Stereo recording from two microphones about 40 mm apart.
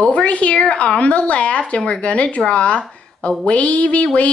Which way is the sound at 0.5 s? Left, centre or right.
Left.